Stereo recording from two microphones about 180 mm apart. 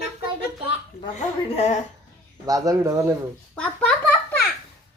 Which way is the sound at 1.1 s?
40° left (ahead or behind).